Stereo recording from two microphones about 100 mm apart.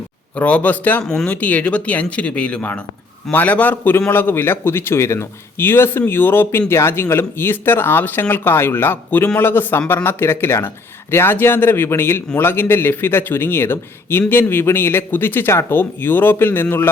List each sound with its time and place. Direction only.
0.3 s a man's voice: 15° left (ahead or behind)